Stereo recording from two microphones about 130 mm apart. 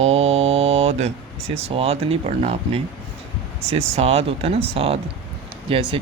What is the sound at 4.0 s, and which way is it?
Mantra, 50° right (ahead or behind).